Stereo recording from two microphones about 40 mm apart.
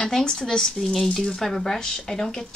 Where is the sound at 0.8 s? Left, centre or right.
Centre.